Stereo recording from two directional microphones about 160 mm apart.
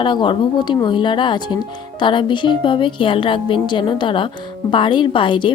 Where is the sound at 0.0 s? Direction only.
30° left (ahead or behind).